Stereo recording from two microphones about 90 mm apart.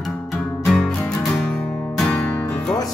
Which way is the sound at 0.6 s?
5° left (ahead or behind).